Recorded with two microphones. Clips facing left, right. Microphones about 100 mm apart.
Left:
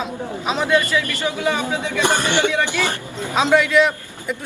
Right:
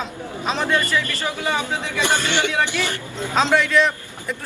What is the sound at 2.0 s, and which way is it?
A man's voice, 20° left (ahead or behind).